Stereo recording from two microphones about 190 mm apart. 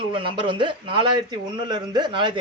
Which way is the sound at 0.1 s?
25° right (ahead or behind).